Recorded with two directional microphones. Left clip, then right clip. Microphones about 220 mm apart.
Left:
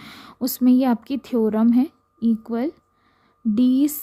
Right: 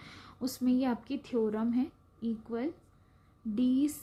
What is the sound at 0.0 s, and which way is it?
A woman's voice, 50° left (ahead or behind).